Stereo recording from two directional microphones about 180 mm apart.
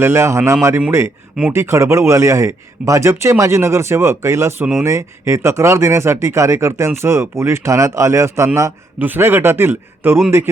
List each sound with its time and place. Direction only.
0.0 s speech: 15° right (ahead or behind)